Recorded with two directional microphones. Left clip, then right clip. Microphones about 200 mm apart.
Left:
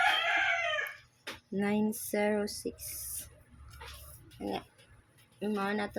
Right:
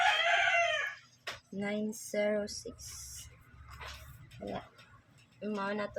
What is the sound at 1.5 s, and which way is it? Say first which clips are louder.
Speech: left 5 dB; 30° left (ahead or behind).